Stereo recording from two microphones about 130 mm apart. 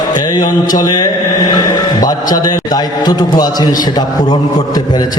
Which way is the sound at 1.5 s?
30° left (ahead or behind).